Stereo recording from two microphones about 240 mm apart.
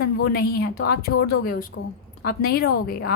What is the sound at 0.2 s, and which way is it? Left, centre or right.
A woman's voice, left.